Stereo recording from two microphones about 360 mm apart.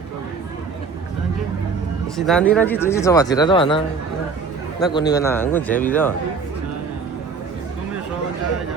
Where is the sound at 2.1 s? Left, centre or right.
Centre.